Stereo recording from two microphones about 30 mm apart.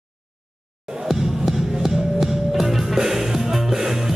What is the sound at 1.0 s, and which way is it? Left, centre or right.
Music, centre.